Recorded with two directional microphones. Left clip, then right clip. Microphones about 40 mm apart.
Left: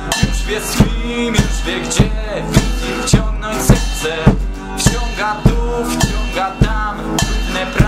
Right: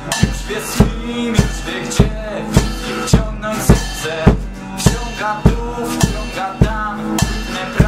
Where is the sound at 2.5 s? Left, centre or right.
Left.